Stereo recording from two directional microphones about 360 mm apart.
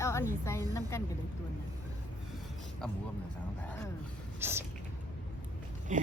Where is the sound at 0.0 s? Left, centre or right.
Centre.